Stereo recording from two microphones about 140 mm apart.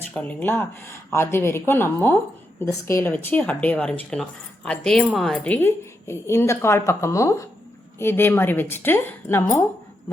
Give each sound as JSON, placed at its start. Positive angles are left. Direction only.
{"t": 0.1, "sound": "speech", "side_deg": 10}